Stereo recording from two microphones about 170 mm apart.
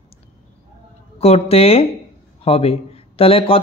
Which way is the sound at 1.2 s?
35° left (ahead or behind).